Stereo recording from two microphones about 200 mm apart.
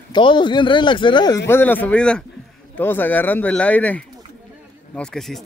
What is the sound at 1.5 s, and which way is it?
Speech, 10° left (ahead or behind).